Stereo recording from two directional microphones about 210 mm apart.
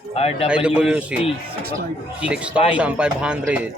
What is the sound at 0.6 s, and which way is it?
Speech, 5° right (ahead or behind).